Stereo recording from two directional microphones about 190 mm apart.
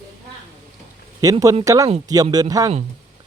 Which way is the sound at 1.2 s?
20° right (ahead or behind).